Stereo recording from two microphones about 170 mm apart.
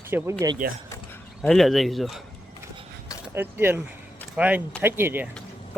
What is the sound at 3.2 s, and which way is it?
Speech, 15° right (ahead or behind).